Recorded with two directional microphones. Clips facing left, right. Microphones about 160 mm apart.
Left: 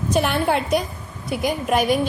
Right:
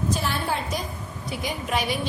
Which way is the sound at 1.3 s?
55° left (ahead or behind).